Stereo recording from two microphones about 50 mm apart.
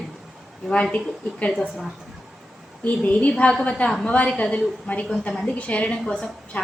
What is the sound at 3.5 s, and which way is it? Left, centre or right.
Speech, centre.